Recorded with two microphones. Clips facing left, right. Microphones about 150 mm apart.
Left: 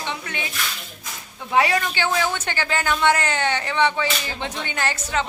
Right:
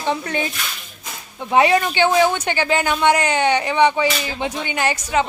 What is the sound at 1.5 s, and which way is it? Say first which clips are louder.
Speech: right 5 dB; 20° right (ahead or behind).